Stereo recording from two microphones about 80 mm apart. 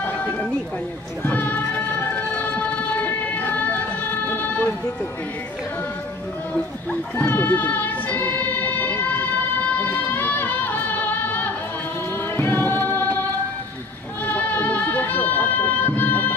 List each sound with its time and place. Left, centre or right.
0.0 s a sound: left
1.2 s music: left
6.5 s music: left
14.2 s music: left